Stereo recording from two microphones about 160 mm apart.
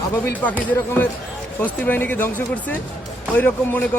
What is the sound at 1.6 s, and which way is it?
A man's voice, 10° left (ahead or behind).